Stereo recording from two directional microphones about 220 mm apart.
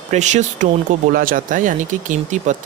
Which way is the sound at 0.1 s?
30° right (ahead or behind).